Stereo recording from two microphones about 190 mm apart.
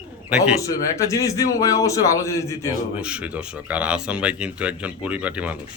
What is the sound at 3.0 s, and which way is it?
Speech, 5° right (ahead or behind).